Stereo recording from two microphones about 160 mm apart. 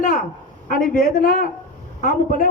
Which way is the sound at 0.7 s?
60° left (ahead or behind).